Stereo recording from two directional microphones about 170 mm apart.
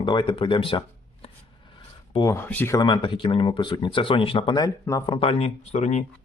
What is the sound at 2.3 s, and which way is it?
Speech, 10° left (ahead or behind).